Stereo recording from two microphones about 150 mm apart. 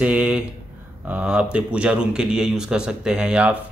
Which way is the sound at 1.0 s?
5° right (ahead or behind).